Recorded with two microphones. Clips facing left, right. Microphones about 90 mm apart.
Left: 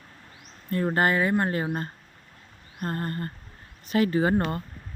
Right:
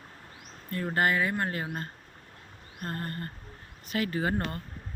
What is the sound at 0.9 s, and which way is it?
Speech, 30° left (ahead or behind).